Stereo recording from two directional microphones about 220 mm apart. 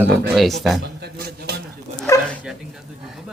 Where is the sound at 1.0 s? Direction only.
45° right (ahead or behind).